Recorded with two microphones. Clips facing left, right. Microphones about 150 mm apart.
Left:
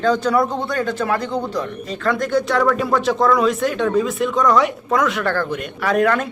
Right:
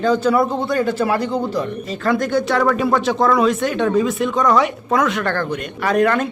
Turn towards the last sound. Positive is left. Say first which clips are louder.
# right 1 dB
turn(degrees=0)  # may be behind; listen again after turning